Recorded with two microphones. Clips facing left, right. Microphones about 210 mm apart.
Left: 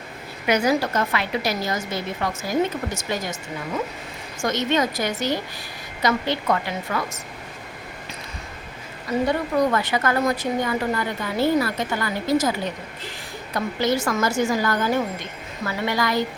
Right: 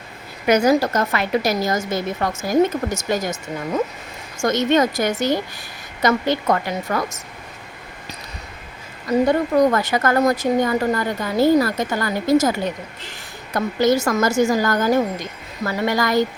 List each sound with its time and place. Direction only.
0.4 s a woman's voice: 45° right (ahead or behind)
4.4 s a woman's voice: 45° right (ahead or behind)
9.3 s a woman's voice: 45° right (ahead or behind)